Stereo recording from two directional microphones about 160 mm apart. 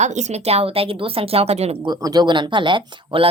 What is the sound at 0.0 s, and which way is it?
Speech, 45° right (ahead or behind).